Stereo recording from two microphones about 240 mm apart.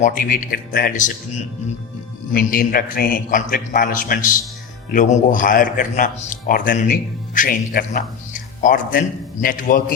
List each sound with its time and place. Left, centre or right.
0.0 s a man's voice: left